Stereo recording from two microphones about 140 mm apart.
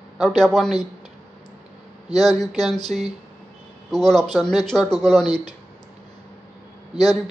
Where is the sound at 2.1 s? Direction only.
30° left (ahead or behind).